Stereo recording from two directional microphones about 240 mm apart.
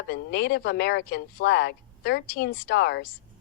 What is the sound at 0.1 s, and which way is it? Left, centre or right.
Speech, left.